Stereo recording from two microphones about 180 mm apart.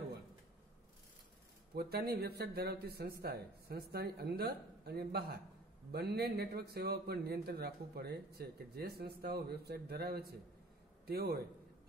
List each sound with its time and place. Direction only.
1.8 s a man's voice: 60° right (ahead or behind)